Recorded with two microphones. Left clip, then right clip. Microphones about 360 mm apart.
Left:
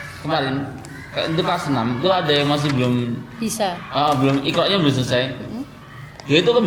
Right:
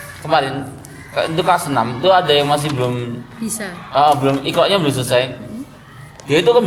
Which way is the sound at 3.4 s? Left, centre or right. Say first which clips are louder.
Left 5 dB; centre.